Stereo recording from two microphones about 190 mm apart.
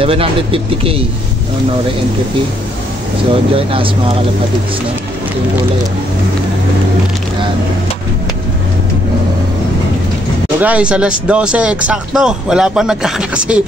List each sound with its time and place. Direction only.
0.0 s speech: 30° right (ahead or behind)
3.5 s speech: 30° right (ahead or behind)
10.6 s speech: 5° right (ahead or behind)